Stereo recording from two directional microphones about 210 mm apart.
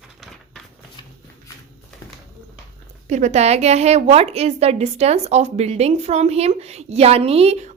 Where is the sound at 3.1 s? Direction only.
35° right (ahead or behind).